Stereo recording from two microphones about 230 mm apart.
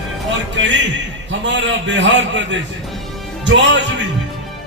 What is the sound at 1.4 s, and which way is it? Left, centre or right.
Music, right.